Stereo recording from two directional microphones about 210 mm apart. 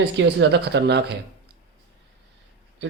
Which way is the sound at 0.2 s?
55° right (ahead or behind).